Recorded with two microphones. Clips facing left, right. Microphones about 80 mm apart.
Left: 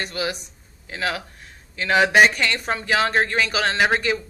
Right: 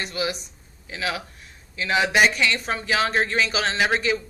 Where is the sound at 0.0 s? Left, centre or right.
Left.